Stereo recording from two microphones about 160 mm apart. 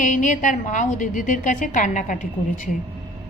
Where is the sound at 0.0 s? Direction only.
50° left (ahead or behind).